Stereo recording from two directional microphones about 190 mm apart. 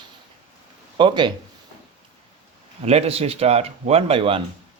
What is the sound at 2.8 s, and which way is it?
Speech, 30° right (ahead or behind).